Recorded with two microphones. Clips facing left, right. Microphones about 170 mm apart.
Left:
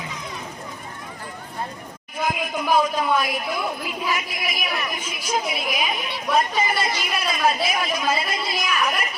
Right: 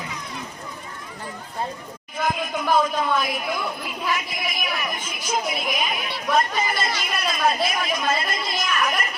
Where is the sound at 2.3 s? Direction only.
5° left (ahead or behind).